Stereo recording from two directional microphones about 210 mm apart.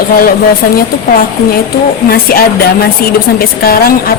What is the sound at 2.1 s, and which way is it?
A woman's voice, 45° left (ahead or behind).